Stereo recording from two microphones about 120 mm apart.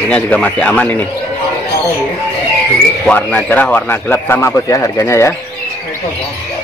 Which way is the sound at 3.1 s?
10° left (ahead or behind).